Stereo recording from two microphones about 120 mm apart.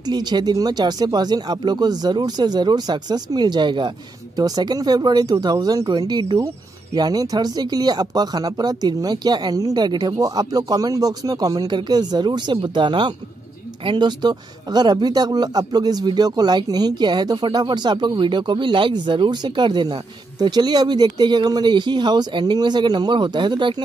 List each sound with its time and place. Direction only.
0.0 s speech: 35° right (ahead or behind)